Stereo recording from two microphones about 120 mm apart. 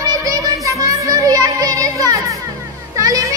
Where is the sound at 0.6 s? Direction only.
25° right (ahead or behind).